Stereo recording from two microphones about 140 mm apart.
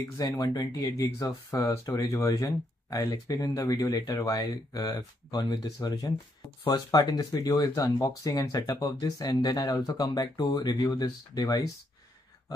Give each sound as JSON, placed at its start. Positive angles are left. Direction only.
{"t": 0.2, "sound": "speech", "side_deg": 30}